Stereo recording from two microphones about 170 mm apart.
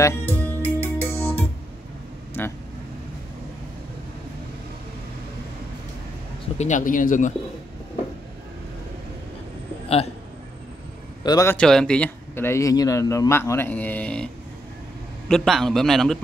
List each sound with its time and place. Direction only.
0.0 s music: 15° left (ahead or behind)
2.4 s vehicle: 10° left (ahead or behind)
6.6 s speech: 50° left (ahead or behind)
11.2 s a man's voice: 20° left (ahead or behind)
11.5 s a man's voice: 5° left (ahead or behind)